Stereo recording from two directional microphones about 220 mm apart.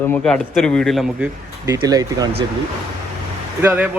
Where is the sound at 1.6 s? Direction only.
15° right (ahead or behind).